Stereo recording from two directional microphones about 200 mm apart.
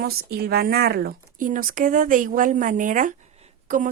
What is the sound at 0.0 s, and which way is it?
Speech, 50° right (ahead or behind).